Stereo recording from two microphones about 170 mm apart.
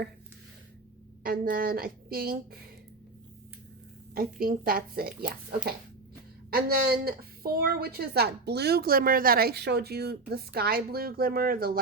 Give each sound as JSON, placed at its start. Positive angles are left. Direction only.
{"t": 1.2, "sound": "a woman's voice", "side_deg": -55}
{"t": 4.1, "sound": "a woman's voice", "side_deg": -60}
{"t": 6.5, "sound": "a woman's voice", "side_deg": -65}